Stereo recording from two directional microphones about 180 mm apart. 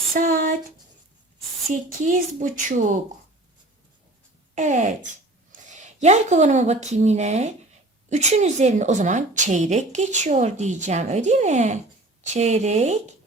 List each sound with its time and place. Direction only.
0.1 s speech: 50° right (ahead or behind)
1.7 s speech: 45° right (ahead or behind)
4.5 s a woman's voice: 45° right (ahead or behind)